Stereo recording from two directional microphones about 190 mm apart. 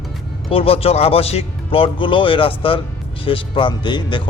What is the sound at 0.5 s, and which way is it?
Speech, 30° left (ahead or behind).